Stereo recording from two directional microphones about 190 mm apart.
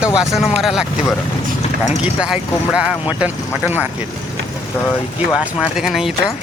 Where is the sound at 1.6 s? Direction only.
35° left (ahead or behind).